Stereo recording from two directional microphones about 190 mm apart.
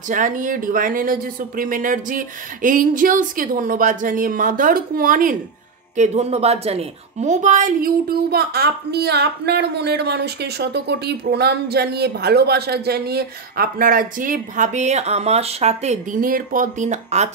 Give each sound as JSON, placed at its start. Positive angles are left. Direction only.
{"t": 0.1, "sound": "a woman's voice", "side_deg": -45}